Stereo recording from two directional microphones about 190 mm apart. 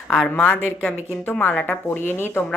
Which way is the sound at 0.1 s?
5° left (ahead or behind).